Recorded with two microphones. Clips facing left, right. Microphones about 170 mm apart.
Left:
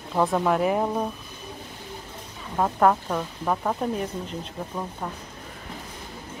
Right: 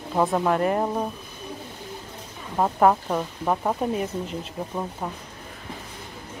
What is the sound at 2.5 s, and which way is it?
Speech, 10° right (ahead or behind).